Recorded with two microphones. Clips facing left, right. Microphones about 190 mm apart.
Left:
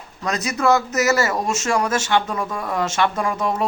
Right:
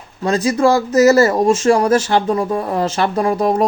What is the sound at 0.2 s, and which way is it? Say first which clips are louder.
Speech: right 8 dB; 30° right (ahead or behind).